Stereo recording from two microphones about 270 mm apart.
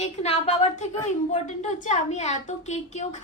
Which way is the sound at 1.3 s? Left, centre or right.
Left.